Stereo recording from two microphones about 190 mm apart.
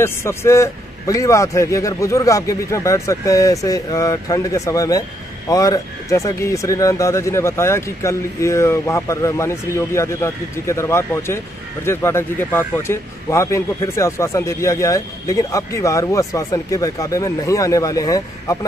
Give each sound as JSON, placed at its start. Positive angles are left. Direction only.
{"t": 0.0, "sound": "a man's voice", "side_deg": 15}